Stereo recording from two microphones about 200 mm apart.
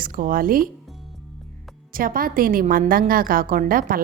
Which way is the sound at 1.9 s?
45° right (ahead or behind).